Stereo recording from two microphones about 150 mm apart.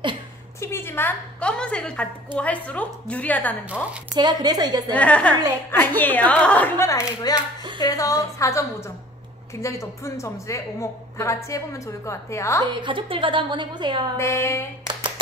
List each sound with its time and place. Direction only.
0.6 s a woman's voice: 15° left (ahead or behind)
4.1 s a woman's voice: 25° right (ahead or behind)
4.9 s a woman's voice: 10° left (ahead or behind)
12.8 s a woman's voice: 35° right (ahead or behind)
14.1 s a sound: 20° left (ahead or behind)